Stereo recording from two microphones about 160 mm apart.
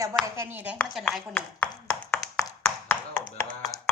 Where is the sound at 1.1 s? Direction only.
10° left (ahead or behind).